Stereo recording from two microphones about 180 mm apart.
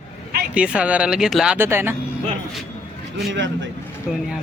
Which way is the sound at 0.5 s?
5° right (ahead or behind).